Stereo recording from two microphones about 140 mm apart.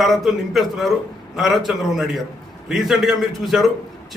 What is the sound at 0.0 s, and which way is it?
A man's voice, centre (ahead or behind).